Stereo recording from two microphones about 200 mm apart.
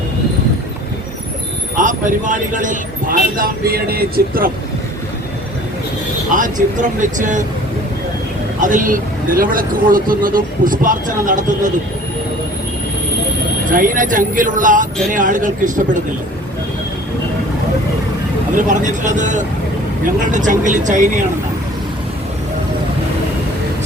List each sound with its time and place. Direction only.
1.7 s speech: 40° right (ahead or behind)
6.3 s speech: 40° right (ahead or behind)
8.6 s speech: 40° right (ahead or behind)
13.7 s speech: 40° right (ahead or behind)
18.5 s speech: 40° right (ahead or behind)